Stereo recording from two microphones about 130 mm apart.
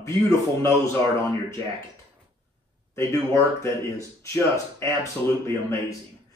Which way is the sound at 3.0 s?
25° left (ahead or behind).